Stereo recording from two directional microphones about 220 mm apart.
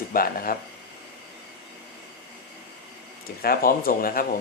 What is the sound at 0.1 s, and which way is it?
Speech, 40° left (ahead or behind).